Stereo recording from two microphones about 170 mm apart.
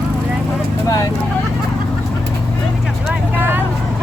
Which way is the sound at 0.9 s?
20° left (ahead or behind).